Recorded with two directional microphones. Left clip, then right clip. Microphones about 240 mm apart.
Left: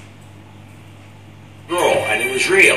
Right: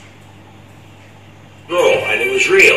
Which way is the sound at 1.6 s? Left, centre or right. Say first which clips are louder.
Right 3 dB; left.